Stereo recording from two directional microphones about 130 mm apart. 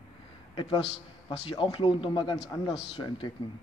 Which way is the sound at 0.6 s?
40° left (ahead or behind).